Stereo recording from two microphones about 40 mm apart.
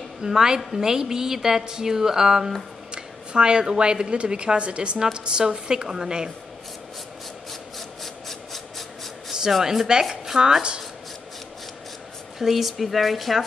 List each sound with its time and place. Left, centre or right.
0.2 s a woman's voice: centre
2.9 s a woman's voice: right
8.0 s a sound: centre
9.3 s speech: centre
12.4 s speech: centre